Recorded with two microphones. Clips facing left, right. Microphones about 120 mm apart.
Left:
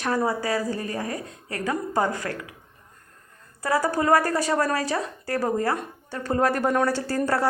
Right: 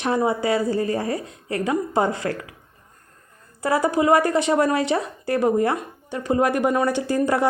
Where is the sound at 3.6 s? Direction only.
25° right (ahead or behind).